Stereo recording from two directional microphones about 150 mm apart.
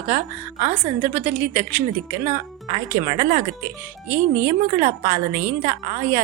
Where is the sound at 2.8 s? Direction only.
30° right (ahead or behind).